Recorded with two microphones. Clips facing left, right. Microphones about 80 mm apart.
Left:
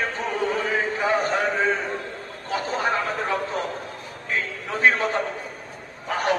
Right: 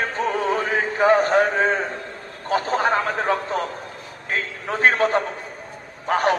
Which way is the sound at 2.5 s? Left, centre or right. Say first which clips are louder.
Right 4 dB; right.